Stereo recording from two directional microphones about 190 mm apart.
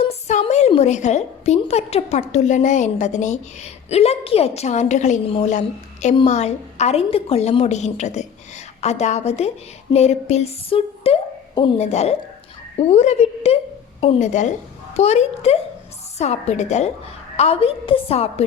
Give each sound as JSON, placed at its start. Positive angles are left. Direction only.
{"t": 0.1, "sound": "a woman's voice", "side_deg": 35}